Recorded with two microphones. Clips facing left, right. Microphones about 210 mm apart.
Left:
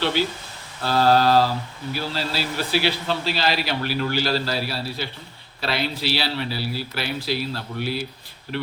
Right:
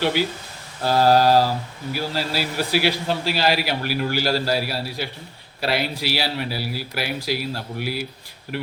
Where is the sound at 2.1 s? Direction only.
10° right (ahead or behind).